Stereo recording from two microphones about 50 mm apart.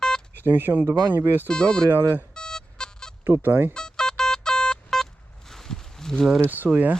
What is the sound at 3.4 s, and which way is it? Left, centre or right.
Speech, right.